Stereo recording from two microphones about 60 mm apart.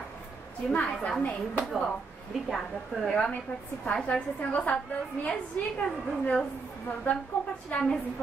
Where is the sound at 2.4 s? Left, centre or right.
Centre.